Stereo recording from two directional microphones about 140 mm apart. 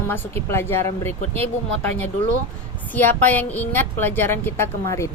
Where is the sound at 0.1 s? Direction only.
15° left (ahead or behind).